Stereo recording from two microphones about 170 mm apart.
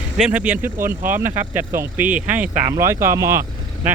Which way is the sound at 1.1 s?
10° right (ahead or behind).